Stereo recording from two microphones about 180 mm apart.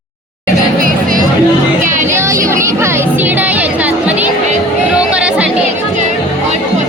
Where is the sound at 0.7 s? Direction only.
50° right (ahead or behind).